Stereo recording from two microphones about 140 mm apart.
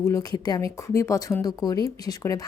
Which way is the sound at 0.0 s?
25° left (ahead or behind).